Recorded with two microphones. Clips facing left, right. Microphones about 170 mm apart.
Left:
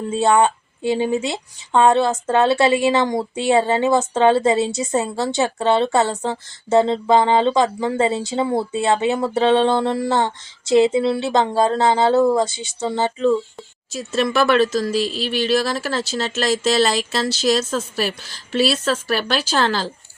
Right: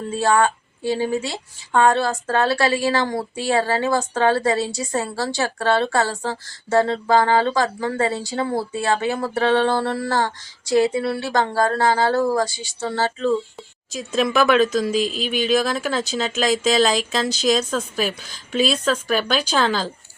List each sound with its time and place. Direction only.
0.1 s speech: 20° left (ahead or behind)
14.0 s speech: centre (ahead or behind)